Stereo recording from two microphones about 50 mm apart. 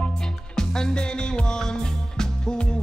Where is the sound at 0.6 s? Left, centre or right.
Centre.